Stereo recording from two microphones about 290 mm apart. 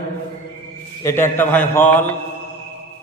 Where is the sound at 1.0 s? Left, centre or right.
Centre.